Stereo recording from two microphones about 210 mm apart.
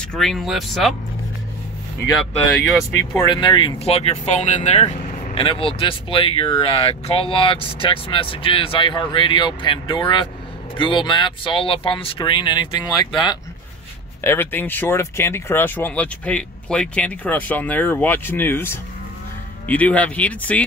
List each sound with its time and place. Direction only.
0.1 s speech: centre (ahead or behind)
3.3 s speech: 20° left (ahead or behind); by 20.6 s 5° left (ahead or behind)